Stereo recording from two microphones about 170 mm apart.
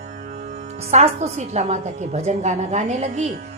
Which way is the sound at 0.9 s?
40° right (ahead or behind).